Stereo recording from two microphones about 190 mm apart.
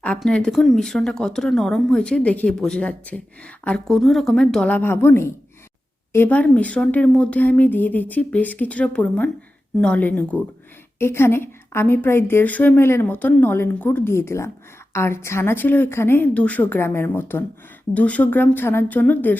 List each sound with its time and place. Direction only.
0.0 s a woman's voice: 5° left (ahead or behind)